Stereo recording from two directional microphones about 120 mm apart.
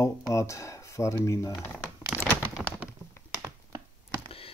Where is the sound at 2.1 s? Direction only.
15° right (ahead or behind).